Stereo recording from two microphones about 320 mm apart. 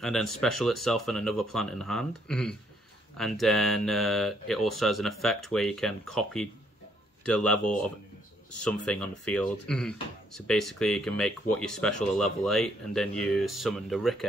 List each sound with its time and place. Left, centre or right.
0.0 s speech: centre